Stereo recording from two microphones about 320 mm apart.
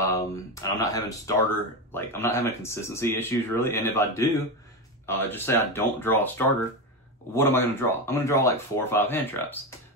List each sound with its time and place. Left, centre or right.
0.1 s speech: centre